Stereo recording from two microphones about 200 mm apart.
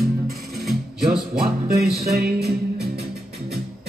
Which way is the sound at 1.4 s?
50° right (ahead or behind).